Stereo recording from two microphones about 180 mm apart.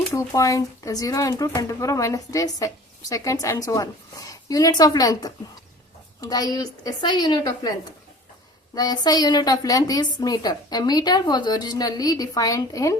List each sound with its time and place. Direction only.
0.1 s speech: 20° left (ahead or behind)
8.7 s speech: 20° left (ahead or behind)